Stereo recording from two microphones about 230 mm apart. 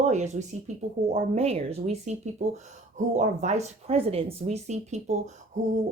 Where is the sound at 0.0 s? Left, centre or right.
Right.